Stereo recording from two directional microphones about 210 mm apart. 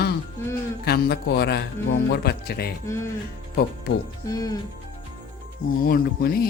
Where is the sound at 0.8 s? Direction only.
50° left (ahead or behind).